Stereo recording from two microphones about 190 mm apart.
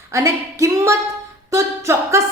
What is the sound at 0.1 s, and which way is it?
Music, 15° right (ahead or behind).